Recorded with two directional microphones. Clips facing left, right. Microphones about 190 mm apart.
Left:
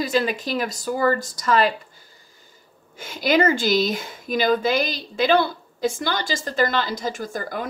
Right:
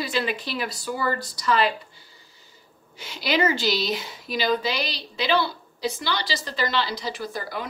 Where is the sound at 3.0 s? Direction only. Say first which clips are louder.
Left 4 dB; 50° left (ahead or behind).